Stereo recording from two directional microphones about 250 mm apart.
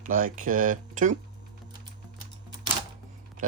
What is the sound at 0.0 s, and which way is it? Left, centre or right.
Speech, right.